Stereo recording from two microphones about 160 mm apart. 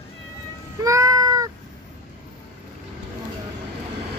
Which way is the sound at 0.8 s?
20° right (ahead or behind).